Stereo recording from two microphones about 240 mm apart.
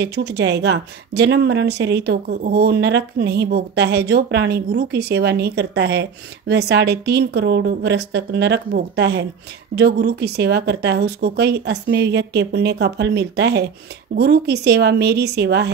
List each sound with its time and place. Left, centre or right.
0.0 s speech: right